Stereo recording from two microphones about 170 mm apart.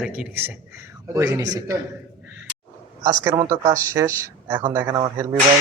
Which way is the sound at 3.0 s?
20° right (ahead or behind).